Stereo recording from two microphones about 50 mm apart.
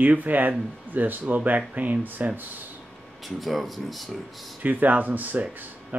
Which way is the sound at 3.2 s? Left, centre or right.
Centre.